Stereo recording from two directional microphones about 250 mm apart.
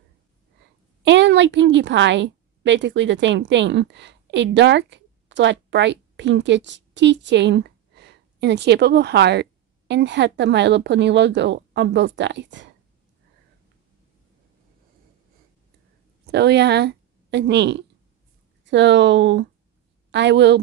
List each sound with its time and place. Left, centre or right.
1.0 s a woman's voice: right
16.3 s a woman's voice: right